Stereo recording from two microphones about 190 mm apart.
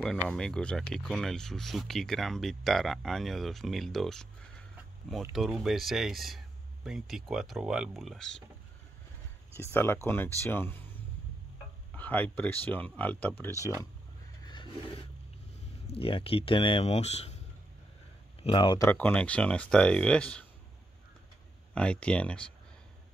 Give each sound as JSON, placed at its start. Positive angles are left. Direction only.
{"t": 0.0, "sound": "speech", "side_deg": 5}
{"t": 9.6, "sound": "speech", "side_deg": 15}
{"t": 11.9, "sound": "speech", "side_deg": 10}
{"t": 14.4, "sound": "a sound", "side_deg": 25}
{"t": 15.9, "sound": "speech", "side_deg": 30}
{"t": 18.4, "sound": "speech", "side_deg": 25}
{"t": 18.9, "sound": "speech", "side_deg": 10}
{"t": 21.7, "sound": "speech", "side_deg": 5}